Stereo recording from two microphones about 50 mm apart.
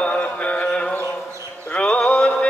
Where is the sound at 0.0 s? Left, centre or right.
Left.